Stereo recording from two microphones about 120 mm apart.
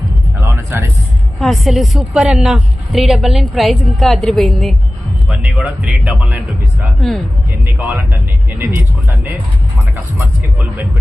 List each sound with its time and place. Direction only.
0.4 s music: 20° right (ahead or behind)
1.4 s a woman's voice: centre (ahead or behind)
8.4 s speech: 15° right (ahead or behind)
9.9 s speech: 15° right (ahead or behind)